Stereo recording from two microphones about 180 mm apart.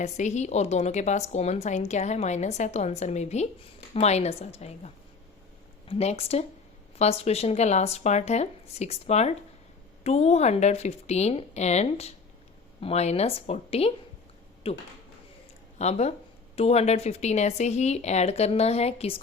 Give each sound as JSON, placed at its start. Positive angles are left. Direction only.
{"t": 0.0, "sound": "a woman's voice", "side_deg": 40}
{"t": 5.9, "sound": "a woman's voice", "side_deg": 35}